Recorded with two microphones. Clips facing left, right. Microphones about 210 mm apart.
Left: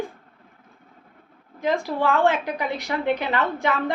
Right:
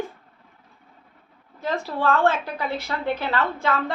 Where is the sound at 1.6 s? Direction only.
10° left (ahead or behind).